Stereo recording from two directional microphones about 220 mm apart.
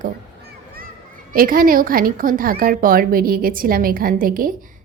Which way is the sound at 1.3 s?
40° right (ahead or behind).